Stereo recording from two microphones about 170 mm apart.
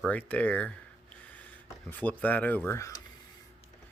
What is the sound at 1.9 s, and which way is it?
Speech, 10° left (ahead or behind).